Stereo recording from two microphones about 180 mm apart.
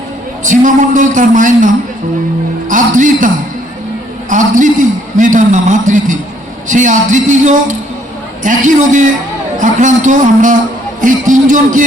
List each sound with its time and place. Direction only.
0.4 s a man's voice: 45° right (ahead or behind)
4.3 s a man's voice: 45° right (ahead or behind)